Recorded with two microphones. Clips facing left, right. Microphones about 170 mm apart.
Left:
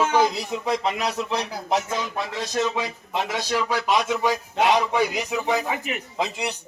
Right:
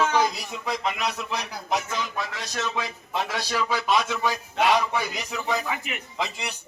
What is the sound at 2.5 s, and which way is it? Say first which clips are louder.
A man's voice: left 5 dB; 20° left (ahead or behind).